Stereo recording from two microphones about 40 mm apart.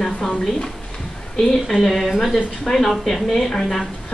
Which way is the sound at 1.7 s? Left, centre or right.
Centre.